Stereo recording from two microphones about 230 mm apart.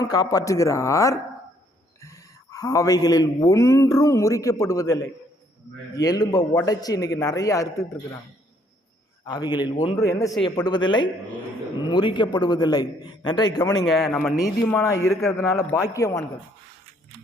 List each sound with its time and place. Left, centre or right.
0.0 s a man's voice: centre
9.2 s a man's voice: centre
13.8 s speech: centre
15.3 s a man's voice: centre